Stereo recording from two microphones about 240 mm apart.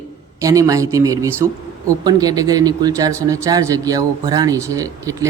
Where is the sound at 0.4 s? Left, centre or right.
Centre.